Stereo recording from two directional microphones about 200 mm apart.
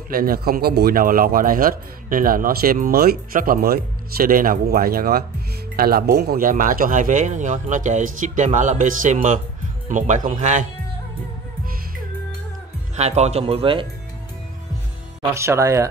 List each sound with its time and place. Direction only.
0.1 s a man's voice: 45° right (ahead or behind)
12.9 s speech: 35° right (ahead or behind)
15.3 s speech: 15° right (ahead or behind)